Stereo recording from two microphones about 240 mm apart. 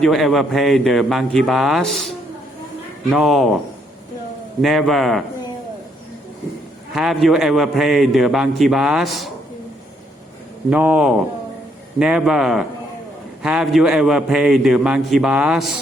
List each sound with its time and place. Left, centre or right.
0.0 s a man's voice: centre
4.6 s a man's voice: centre
6.9 s a man's voice: centre
10.7 s a man's voice: centre